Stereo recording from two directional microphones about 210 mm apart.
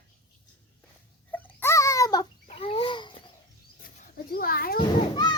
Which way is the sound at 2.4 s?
30° left (ahead or behind).